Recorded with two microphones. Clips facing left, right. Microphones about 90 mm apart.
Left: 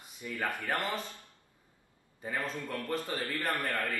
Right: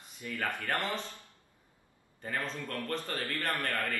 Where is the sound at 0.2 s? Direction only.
20° left (ahead or behind).